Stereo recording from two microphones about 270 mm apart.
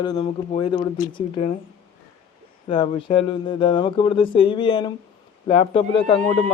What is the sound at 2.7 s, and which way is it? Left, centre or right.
A man's voice, centre.